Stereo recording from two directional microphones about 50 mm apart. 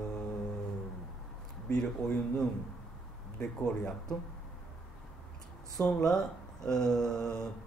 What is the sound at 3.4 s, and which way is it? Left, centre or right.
Speech, centre.